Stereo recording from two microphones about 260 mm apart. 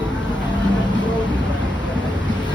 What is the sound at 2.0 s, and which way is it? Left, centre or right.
Boat, centre.